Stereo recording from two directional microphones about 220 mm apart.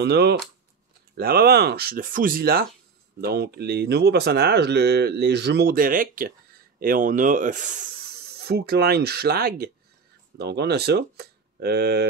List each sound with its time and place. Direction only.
0.0 s speech: 50° right (ahead or behind)
8.4 s speech: 45° right (ahead or behind)